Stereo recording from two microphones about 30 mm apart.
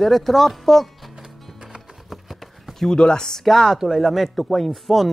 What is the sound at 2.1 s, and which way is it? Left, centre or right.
Clip-clop, centre.